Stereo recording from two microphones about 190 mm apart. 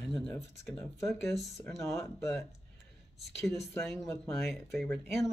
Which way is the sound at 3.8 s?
Centre (ahead or behind).